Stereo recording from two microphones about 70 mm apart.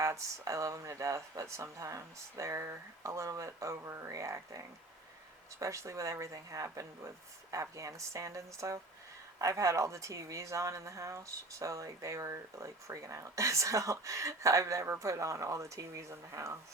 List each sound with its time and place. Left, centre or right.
0.0 s speech: right